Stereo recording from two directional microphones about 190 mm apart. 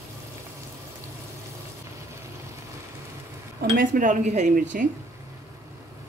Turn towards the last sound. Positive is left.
turn(degrees=-45)  # may be behind; listen again after turning